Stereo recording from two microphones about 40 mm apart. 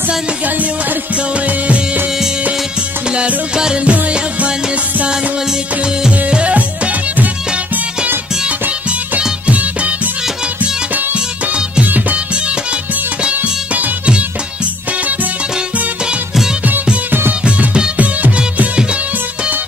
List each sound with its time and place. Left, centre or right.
3.7 s music: right
6.2 s music: right
8.5 s music: right
11.1 s music: right
11.8 s music: right
13.2 s music: right
17.9 s music: right